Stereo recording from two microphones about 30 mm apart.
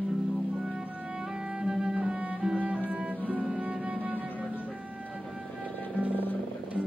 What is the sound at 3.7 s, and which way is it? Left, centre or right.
Music, right.